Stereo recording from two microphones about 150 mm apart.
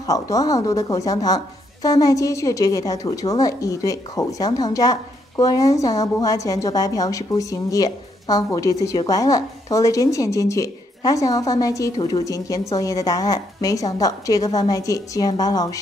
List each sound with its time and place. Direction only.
0.0 s a woman's voice: 25° left (ahead or behind)